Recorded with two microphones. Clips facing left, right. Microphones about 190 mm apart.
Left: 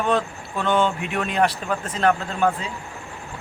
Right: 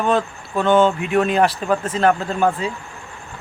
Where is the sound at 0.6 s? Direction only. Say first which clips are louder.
Right 6 dB; 40° right (ahead or behind).